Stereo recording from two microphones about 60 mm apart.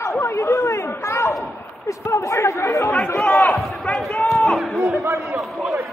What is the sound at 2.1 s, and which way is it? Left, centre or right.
Speech, left.